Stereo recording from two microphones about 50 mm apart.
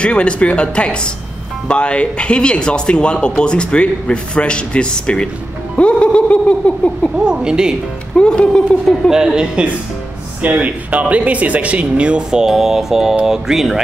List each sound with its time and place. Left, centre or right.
0.0 s speech: left
7.2 s speech: centre
8.2 s speech: centre
9.1 s speech: centre
10.4 s speech: right; by 13.7 s centre